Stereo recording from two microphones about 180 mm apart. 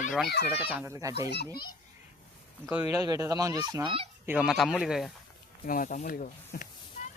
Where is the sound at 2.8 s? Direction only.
20° right (ahead or behind); by 5.1 s centre (ahead or behind).